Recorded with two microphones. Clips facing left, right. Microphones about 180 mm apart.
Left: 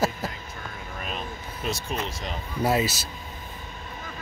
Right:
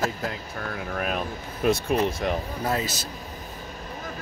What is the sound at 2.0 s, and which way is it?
Speech, 55° right (ahead or behind).